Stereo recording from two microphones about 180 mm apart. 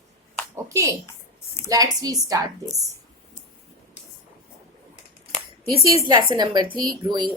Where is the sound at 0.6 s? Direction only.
15° right (ahead or behind).